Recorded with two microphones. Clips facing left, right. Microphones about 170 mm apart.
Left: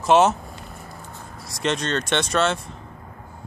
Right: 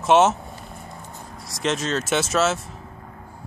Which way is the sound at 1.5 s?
Centre (ahead or behind).